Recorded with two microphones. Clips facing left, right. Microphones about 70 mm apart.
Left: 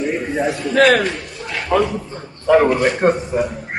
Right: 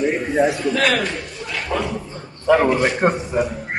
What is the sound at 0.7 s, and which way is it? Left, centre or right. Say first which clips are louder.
A man's voice: left 6 dB; left.